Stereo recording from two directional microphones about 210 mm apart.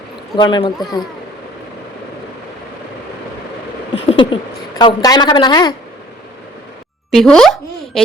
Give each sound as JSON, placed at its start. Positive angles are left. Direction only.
{"t": 0.3, "sound": "a woman's voice", "side_deg": 20}
{"t": 3.9, "sound": "a sound", "side_deg": 25}
{"t": 4.8, "sound": "a woman's voice", "side_deg": 20}
{"t": 7.1, "sound": "speech", "side_deg": 0}